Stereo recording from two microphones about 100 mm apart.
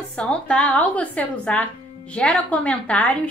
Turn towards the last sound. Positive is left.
turn(degrees=15)  # may be behind; listen again after turning